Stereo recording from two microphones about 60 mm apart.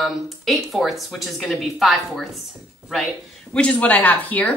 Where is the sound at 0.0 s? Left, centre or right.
Centre.